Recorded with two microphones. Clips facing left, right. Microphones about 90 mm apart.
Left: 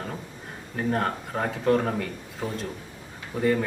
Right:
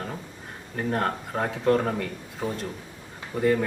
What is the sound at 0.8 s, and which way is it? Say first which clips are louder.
Speech: even; centre (ahead or behind).